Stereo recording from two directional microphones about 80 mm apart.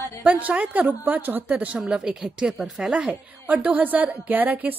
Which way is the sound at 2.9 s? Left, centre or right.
Centre.